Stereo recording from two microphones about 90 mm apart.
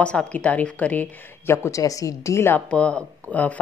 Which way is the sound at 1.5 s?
30° left (ahead or behind).